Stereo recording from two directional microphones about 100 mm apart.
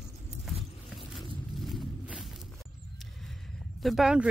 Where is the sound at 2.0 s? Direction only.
10° right (ahead or behind).